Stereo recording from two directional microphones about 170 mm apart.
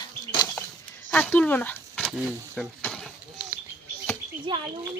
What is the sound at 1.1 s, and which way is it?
Speech, 10° left (ahead or behind).